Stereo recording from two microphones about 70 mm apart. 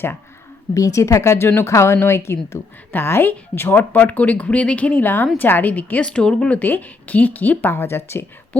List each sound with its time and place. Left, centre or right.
0.7 s a woman's voice: left; by 6.6 s centre
6.6 s speech: left